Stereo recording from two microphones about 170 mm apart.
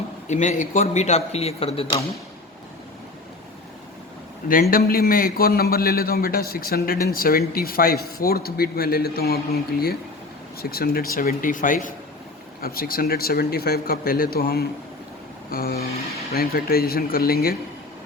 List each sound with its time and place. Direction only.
0.3 s speech: 45° left (ahead or behind)
4.7 s speech: 60° left (ahead or behind)